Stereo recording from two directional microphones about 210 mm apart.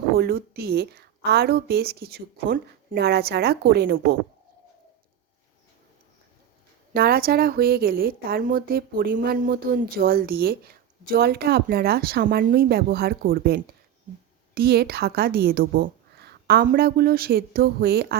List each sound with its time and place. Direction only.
0.2 s a woman's voice: 50° right (ahead or behind)
6.9 s a woman's voice: 45° right (ahead or behind)